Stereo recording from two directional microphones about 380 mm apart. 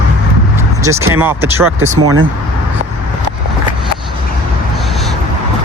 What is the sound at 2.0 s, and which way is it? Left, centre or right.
Speech, right.